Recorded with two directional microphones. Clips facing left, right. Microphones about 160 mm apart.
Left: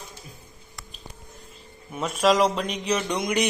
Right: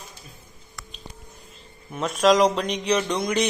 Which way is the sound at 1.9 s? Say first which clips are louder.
Right 2 dB; 5° left (ahead or behind).